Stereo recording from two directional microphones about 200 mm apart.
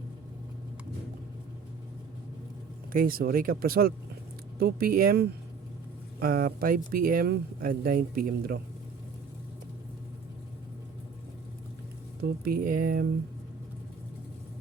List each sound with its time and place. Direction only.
2.9 s speech: 45° right (ahead or behind)
12.2 s speech: 50° right (ahead or behind)